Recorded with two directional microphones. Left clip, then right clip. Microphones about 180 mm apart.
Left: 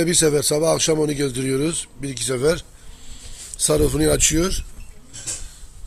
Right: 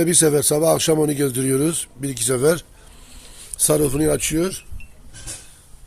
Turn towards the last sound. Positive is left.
turn(degrees=0)  # may be behind; listen again after turning